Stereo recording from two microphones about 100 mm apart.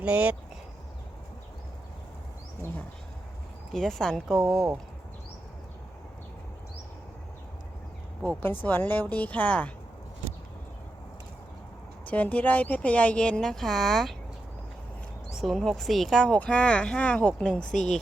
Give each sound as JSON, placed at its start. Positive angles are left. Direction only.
{"t": 0.0, "sound": "speech", "side_deg": -15}
{"t": 3.7, "sound": "speech", "side_deg": 5}
{"t": 8.6, "sound": "speech", "side_deg": 20}
{"t": 12.0, "sound": "speech", "side_deg": 15}
{"t": 15.4, "sound": "speech", "side_deg": 0}